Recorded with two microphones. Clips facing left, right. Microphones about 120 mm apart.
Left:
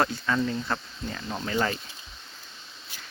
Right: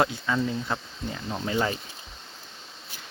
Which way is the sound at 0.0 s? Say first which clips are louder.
Right 1 dB; 15° right (ahead or behind).